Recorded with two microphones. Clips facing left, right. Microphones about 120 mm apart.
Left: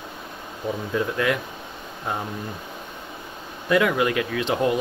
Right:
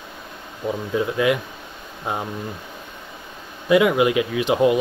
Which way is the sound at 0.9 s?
15° right (ahead or behind).